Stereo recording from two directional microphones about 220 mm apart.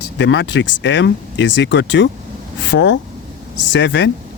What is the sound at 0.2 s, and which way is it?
A man's voice, 55° left (ahead or behind).